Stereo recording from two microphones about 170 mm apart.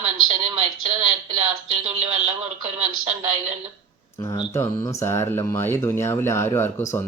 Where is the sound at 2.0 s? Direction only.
40° right (ahead or behind).